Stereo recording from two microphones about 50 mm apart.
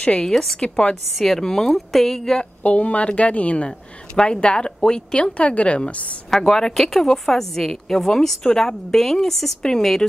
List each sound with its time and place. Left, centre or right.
0.0 s speech: centre
0.3 s a woman's voice: centre
0.6 s speech: centre
1.1 s a woman's voice: centre
2.6 s speech: left
6.3 s a woman's voice: centre